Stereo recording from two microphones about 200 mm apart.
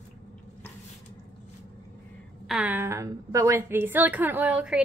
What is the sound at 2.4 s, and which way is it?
A woman's voice, 5° right (ahead or behind).